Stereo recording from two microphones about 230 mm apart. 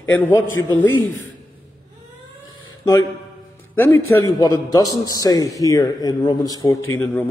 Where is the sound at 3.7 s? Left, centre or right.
Centre.